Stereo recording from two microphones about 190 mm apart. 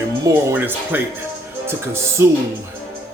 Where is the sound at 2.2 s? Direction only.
15° right (ahead or behind).